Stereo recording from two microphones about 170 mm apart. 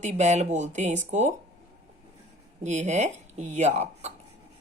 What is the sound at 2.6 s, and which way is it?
Speech, 45° right (ahead or behind).